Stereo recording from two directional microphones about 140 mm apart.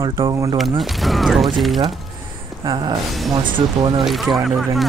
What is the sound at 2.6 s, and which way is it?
Speech, 35° right (ahead or behind).